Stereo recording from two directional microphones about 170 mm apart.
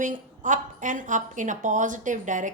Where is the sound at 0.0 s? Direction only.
50° right (ahead or behind).